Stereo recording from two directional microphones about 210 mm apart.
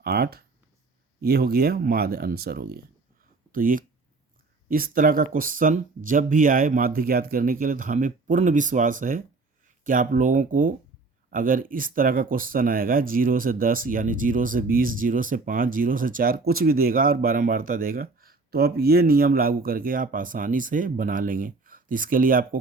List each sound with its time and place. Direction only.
0.0 s speech: 50° right (ahead or behind)